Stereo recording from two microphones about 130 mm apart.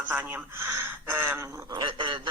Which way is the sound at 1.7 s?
40° right (ahead or behind).